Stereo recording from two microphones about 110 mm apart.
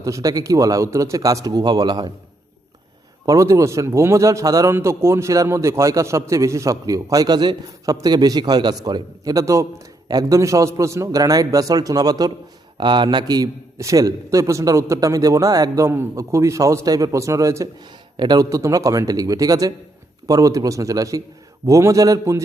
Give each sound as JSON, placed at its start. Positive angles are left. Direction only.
{"t": 0.0, "sound": "a man's voice", "side_deg": -30}
{"t": 3.2, "sound": "a man's voice", "side_deg": -30}